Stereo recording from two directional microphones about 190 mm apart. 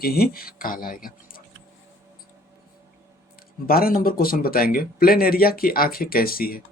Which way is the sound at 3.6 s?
50° left (ahead or behind).